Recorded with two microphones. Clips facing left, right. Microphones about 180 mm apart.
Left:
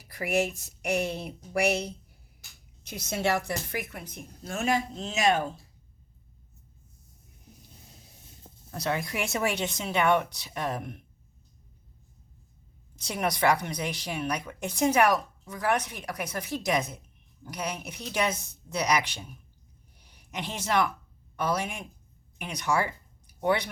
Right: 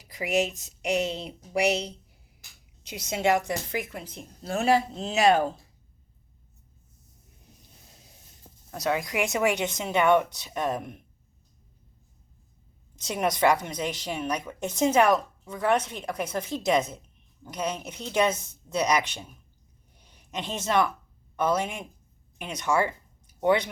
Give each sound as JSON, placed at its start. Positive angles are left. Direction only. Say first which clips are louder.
{"t": 0.0, "sound": "a woman's voice", "louder": "right 1 dB", "side_deg": -15}
{"t": 8.7, "sound": "a woman's voice", "louder": "right 3 dB", "side_deg": -15}
{"t": 13.0, "sound": "a woman's voice", "louder": "right 3 dB", "side_deg": -20}
{"t": 20.0, "sound": "a sound", "louder": "right 2 dB", "side_deg": -20}
{"t": 21.3, "sound": "a woman's voice", "louder": "right 3 dB", "side_deg": -20}